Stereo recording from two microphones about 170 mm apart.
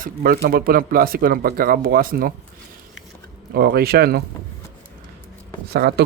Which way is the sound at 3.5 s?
65° right (ahead or behind).